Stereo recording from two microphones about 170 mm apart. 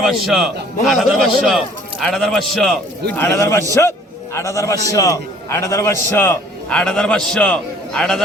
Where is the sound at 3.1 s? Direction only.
15° left (ahead or behind).